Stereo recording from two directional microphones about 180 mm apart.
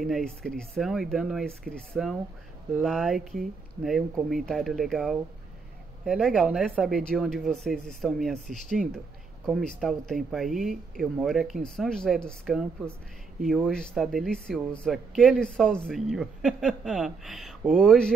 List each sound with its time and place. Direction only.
0.0 s speech: 5° left (ahead or behind)
13.7 s speech: 5° left (ahead or behind)